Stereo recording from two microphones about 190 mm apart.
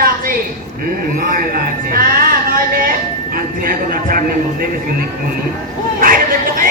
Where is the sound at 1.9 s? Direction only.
50° right (ahead or behind).